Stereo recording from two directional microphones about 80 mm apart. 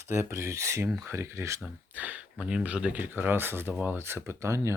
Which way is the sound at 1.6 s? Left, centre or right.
Right.